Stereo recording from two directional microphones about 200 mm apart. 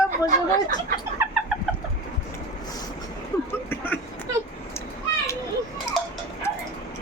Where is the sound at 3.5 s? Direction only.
10° left (ahead or behind).